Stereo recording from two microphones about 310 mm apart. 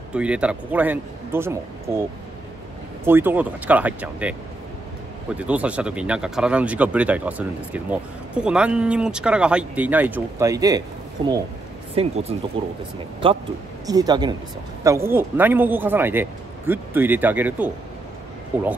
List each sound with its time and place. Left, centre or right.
0.1 s speech: centre
3.1 s a man's voice: centre